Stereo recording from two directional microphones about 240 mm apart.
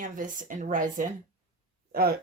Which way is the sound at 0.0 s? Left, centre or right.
Right.